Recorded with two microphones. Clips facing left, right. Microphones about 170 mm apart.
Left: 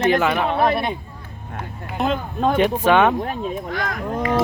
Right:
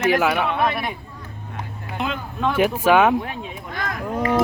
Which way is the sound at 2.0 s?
45° left (ahead or behind).